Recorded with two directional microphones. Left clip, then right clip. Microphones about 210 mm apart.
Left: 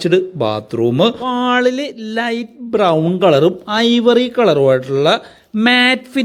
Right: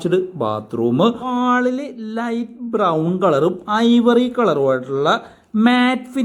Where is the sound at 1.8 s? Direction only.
55° left (ahead or behind).